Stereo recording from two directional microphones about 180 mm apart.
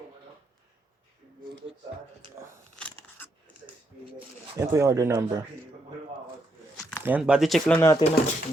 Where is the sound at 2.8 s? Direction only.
10° left (ahead or behind).